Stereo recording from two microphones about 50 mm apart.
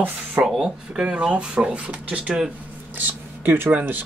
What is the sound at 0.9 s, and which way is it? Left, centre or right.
Speech, right.